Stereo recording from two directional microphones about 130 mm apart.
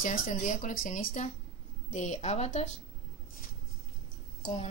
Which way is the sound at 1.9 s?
60° left (ahead or behind).